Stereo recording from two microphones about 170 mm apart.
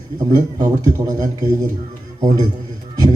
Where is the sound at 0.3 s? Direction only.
20° right (ahead or behind).